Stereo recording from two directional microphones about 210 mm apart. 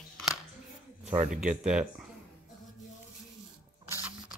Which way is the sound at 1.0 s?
5° right (ahead or behind).